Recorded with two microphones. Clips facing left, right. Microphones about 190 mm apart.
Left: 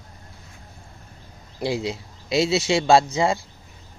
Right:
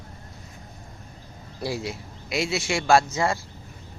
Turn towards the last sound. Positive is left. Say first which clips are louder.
# left 3 dB
turn(degrees=15)  # may be behind; listen again after turning